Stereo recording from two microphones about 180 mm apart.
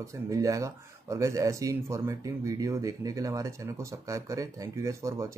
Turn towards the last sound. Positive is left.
turn(degrees=-15)  # may be behind; listen again after turning